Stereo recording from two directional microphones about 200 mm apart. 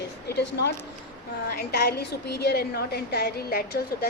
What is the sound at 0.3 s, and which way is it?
A woman's voice, 55° left (ahead or behind).